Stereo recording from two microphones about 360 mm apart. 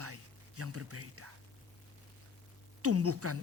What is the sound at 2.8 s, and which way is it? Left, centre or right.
Speech, right.